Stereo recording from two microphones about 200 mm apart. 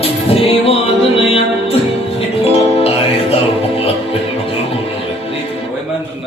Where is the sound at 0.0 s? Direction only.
30° left (ahead or behind).